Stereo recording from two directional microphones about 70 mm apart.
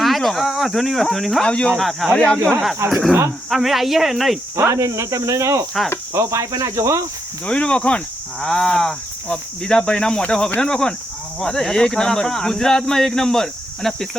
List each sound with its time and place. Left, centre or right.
0.0 s speech: centre
1.5 s speech: centre
1.8 s speech: centre
2.1 s speech: centre
2.9 s speech: centre
4.5 s speech: right
7.4 s speech: centre